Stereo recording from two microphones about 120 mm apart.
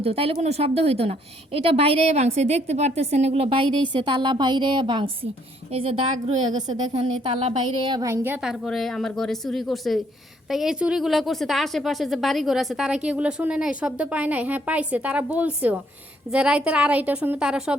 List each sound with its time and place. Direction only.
0.0 s a woman's voice: 55° right (ahead or behind)
6.5 s a woman's voice: 35° right (ahead or behind); by 7.9 s 50° right (ahead or behind)
7.9 s a woman's voice: 35° right (ahead or behind)
8.1 s a woman's voice: 15° right (ahead or behind)
8.4 s a woman's voice: centre (ahead or behind)